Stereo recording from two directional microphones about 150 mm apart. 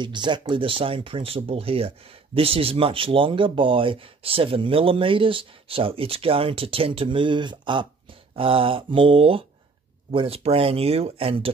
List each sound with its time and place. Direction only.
0.0 s speech: 30° right (ahead or behind)